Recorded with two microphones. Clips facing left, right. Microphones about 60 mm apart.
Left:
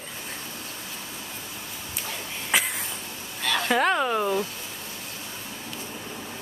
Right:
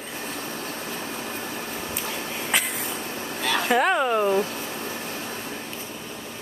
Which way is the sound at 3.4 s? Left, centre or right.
Centre.